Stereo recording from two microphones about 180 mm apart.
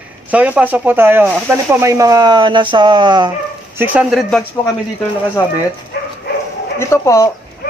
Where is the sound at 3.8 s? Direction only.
5° right (ahead or behind).